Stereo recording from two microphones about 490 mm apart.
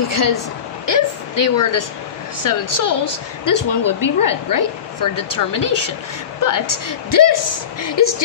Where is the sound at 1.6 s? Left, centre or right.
Left.